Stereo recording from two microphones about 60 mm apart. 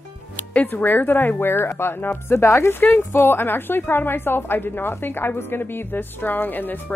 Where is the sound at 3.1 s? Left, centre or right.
Left.